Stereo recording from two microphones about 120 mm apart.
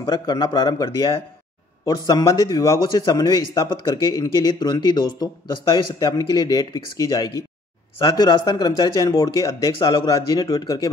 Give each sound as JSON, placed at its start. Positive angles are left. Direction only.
{"t": 0.0, "sound": "a man's voice", "side_deg": 35}